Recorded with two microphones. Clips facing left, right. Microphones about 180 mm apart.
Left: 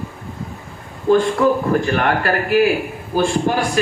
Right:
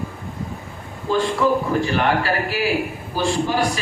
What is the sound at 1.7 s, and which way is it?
A man's voice, 55° left (ahead or behind).